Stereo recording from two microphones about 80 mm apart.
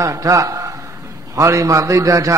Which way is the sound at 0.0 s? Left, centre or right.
Right.